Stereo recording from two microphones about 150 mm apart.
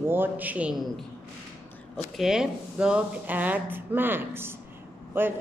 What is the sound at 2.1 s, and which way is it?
A woman's voice, 5° right (ahead or behind).